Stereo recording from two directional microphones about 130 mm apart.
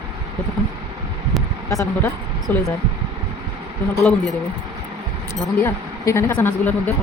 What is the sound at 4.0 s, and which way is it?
Speech, centre (ahead or behind).